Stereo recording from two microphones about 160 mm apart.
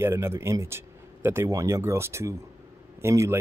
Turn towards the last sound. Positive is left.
turn(degrees=-15)  # may be behind; listen again after turning